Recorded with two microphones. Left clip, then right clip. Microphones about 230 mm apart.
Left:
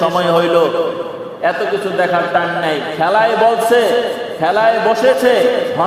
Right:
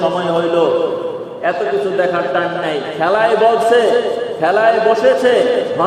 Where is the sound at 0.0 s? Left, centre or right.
Left.